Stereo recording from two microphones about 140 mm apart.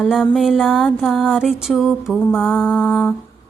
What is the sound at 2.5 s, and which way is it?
Mantra, 15° left (ahead or behind).